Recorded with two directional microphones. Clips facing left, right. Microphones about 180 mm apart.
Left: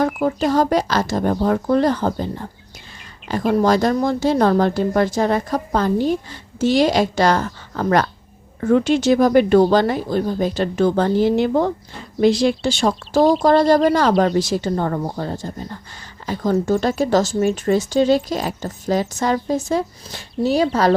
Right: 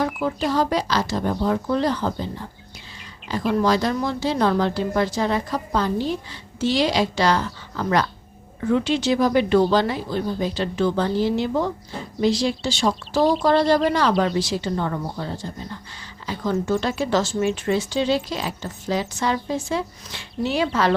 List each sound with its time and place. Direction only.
0.0 s speech: 50° left (ahead or behind)